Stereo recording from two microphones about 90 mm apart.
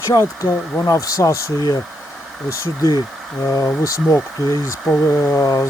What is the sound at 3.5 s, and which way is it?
Speech, 40° left (ahead or behind).